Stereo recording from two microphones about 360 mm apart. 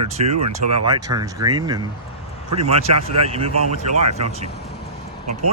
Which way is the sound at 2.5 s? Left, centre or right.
Right.